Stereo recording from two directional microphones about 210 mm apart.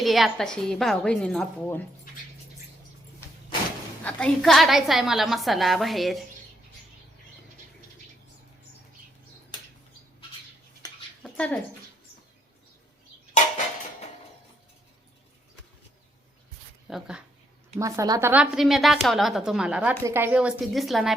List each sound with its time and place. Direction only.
0.0 s a woman's voice: centre (ahead or behind)
4.0 s a woman's voice: 5° left (ahead or behind)
10.8 s a sound: 20° left (ahead or behind)
11.2 s bathtub: 5° left (ahead or behind)
16.9 s a woman's voice: 5° right (ahead or behind)
17.7 s a woman's voice: 15° right (ahead or behind)